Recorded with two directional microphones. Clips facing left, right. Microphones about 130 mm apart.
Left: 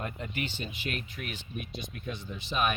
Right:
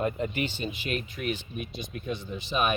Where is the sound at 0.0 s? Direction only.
20° right (ahead or behind).